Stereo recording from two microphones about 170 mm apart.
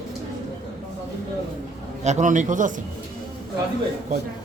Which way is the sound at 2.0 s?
45° right (ahead or behind).